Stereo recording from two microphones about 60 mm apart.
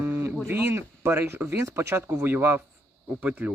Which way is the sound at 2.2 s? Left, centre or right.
Right.